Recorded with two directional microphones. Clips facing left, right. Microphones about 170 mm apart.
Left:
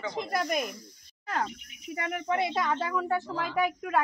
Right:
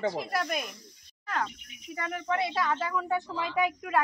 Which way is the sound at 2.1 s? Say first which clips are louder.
Left 1 dB; 25° left (ahead or behind).